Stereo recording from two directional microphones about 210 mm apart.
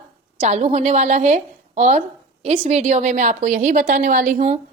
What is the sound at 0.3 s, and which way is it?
A woman's voice, 30° right (ahead or behind).